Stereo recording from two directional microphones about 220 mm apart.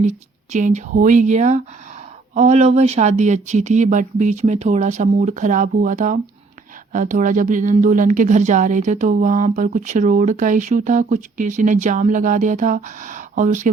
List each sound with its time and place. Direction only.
0.0 s speech: 30° right (ahead or behind)